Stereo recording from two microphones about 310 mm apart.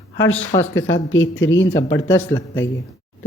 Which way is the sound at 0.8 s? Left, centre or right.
Left.